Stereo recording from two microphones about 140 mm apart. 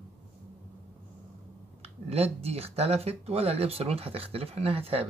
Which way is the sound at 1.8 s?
45° right (ahead or behind).